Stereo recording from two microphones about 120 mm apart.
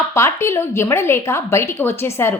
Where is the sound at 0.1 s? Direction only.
25° left (ahead or behind).